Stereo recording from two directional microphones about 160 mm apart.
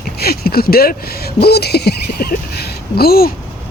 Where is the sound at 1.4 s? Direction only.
90° left; by 3.3 s 75° left (ahead or behind).